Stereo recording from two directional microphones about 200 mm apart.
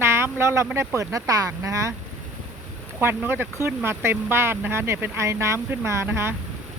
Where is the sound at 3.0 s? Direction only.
10° right (ahead or behind).